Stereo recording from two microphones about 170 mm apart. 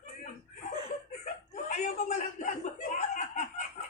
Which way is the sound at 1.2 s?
45° left (ahead or behind).